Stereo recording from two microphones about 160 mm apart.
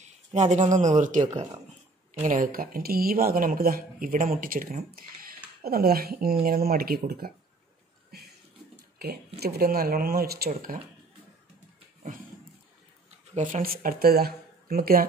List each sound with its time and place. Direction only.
0.0 s speech: 45° right (ahead or behind); by 7.3 s 70° right (ahead or behind)
8.9 s a sound: 75° right (ahead or behind)
9.4 s speech: 75° right (ahead or behind)
13.3 s speech: 55° right (ahead or behind); by 15.0 s 70° right (ahead or behind)